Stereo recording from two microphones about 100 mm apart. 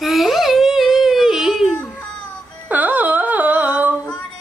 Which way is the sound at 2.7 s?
15° right (ahead or behind).